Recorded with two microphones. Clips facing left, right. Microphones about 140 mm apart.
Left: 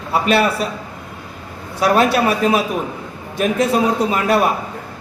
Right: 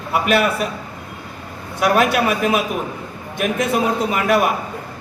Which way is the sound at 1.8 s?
30° left (ahead or behind).